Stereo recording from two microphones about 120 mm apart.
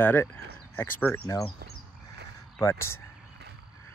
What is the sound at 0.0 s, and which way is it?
Speech, 20° left (ahead or behind).